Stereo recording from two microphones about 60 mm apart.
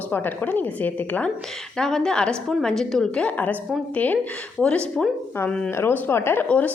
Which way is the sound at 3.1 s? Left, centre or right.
Left.